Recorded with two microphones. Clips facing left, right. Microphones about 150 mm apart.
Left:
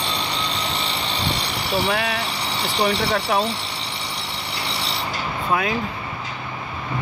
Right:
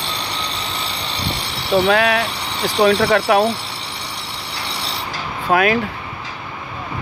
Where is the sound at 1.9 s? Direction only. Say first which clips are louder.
Right 8 dB; 90° right.